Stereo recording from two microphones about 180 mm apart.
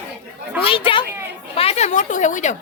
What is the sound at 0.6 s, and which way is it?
A woman's voice, 30° left (ahead or behind).